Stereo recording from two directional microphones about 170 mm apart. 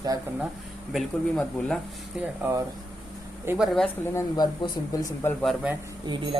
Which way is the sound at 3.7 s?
10° left (ahead or behind).